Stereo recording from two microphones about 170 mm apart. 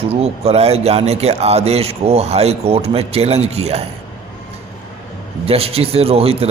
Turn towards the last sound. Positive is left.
turn(degrees=-35)  # may be behind; listen again after turning